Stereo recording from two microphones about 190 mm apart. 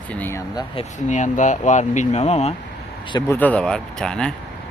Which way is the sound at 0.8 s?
30° left (ahead or behind).